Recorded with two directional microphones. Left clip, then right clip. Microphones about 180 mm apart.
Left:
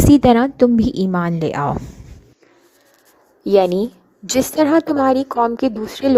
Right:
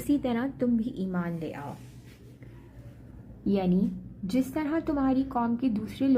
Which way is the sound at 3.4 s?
50° left (ahead or behind).